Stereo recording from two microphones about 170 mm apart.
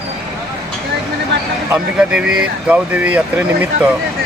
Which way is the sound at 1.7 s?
5° right (ahead or behind).